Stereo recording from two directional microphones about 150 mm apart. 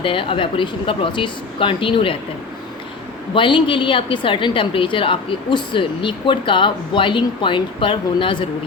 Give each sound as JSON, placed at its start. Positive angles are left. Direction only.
{"t": 0.0, "sound": "a woman's voice", "side_deg": 35}
{"t": 3.3, "sound": "a woman's voice", "side_deg": 35}